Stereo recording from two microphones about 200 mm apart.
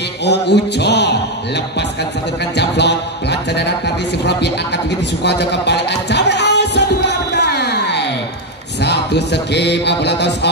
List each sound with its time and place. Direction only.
0.2 s speech: 55° left (ahead or behind)
2.5 s speech: 60° left (ahead or behind)
5.2 s music: 55° left (ahead or behind)
8.8 s speech: 55° left (ahead or behind)